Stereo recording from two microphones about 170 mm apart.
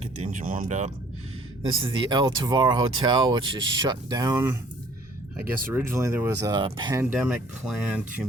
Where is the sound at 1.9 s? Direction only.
30° right (ahead or behind).